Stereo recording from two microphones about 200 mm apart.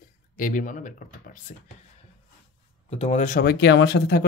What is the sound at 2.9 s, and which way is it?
Speech, 35° left (ahead or behind).